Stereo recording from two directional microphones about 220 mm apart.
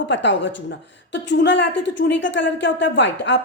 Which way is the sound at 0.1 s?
55° left (ahead or behind).